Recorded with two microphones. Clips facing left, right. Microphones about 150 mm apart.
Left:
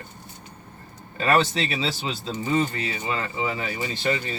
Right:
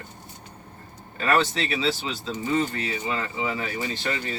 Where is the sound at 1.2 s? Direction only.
20° left (ahead or behind).